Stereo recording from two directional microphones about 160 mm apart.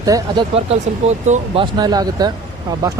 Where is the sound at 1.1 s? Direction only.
45° right (ahead or behind).